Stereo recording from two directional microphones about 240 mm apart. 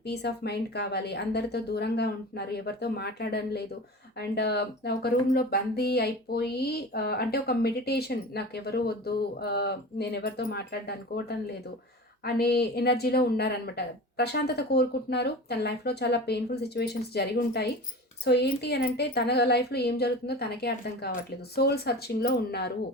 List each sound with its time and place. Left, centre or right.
0.0 s speech: left